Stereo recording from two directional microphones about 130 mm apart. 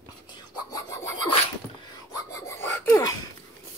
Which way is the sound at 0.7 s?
25° left (ahead or behind).